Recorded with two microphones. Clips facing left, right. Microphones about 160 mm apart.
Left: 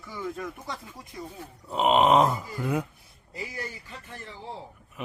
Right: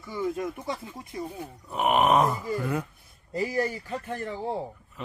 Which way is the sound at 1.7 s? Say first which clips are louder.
Left 2 dB; 20° left (ahead or behind).